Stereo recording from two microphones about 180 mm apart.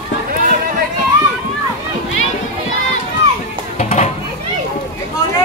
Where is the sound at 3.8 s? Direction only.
40° left (ahead or behind).